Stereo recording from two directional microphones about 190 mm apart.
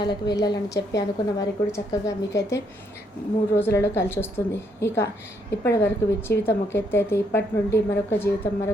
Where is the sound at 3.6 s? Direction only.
15° left (ahead or behind).